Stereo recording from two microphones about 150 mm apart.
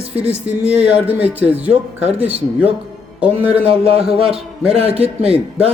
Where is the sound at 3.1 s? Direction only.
10° right (ahead or behind).